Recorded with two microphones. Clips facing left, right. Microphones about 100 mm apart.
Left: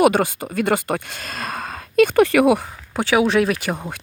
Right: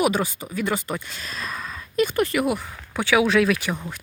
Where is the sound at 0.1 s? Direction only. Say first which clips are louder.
Left 5 dB; 55° left (ahead or behind); by 2.6 s 85° left.